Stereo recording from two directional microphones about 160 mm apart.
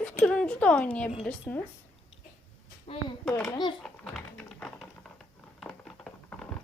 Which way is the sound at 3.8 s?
5° left (ahead or behind).